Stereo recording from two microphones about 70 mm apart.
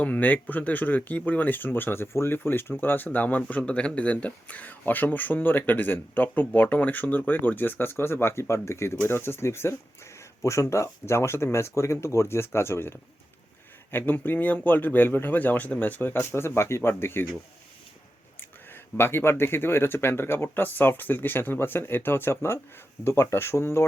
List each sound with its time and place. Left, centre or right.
0.0 s speech: left
13.9 s speech: left
18.3 s speech: left